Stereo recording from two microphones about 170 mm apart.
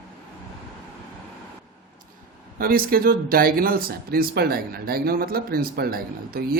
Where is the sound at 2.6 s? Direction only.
60° right (ahead or behind).